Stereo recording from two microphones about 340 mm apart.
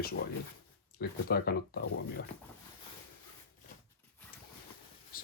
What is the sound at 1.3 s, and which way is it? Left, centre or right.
Speech, left.